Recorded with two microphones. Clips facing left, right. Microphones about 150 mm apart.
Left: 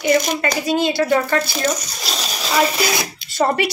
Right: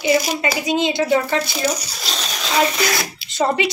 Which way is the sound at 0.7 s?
20° right (ahead or behind).